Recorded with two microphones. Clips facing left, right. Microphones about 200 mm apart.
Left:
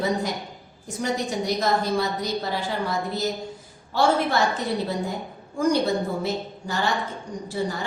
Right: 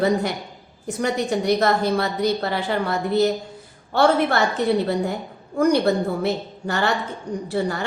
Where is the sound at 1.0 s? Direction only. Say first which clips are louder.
Right 4 dB; 65° right (ahead or behind).